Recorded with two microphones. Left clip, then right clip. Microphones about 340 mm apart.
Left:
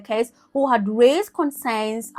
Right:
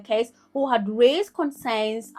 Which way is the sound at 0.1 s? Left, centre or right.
Left.